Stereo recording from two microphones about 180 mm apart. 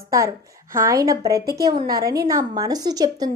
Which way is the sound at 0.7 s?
20° right (ahead or behind).